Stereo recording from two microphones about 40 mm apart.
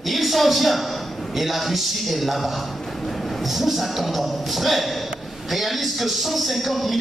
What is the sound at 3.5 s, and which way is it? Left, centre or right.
A man's voice, centre.